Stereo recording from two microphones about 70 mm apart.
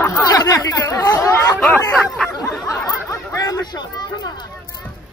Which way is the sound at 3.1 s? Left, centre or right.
Left.